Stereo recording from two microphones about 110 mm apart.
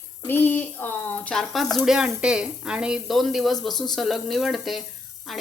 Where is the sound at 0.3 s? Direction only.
15° left (ahead or behind).